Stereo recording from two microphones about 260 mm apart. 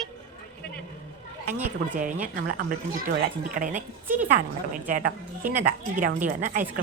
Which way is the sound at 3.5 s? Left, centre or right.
Right.